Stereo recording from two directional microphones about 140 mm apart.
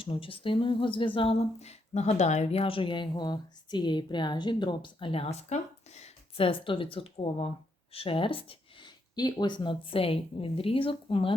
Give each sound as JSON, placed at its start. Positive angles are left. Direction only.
{"t": 0.0, "sound": "speech", "side_deg": 40}